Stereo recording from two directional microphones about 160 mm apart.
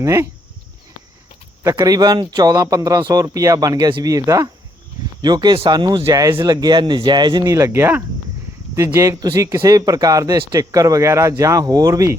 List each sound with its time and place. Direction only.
0.0 s speech: 20° right (ahead or behind)
1.6 s speech: 20° right (ahead or behind)